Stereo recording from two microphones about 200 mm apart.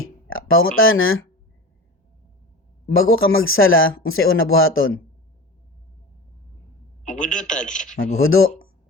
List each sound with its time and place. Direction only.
0.0 s speech: 85° left
2.9 s speech: 90° left
7.0 s a man's voice: 40° left (ahead or behind)
7.9 s speech: 90° left